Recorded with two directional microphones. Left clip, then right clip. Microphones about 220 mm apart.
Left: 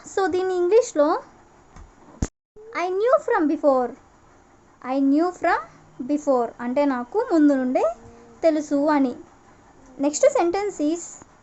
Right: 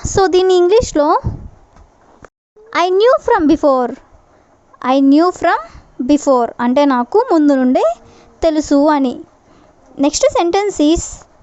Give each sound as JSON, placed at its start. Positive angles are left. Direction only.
{"t": 0.0, "sound": "a woman's voice", "side_deg": -40}
{"t": 2.6, "sound": "a woman's voice", "side_deg": -40}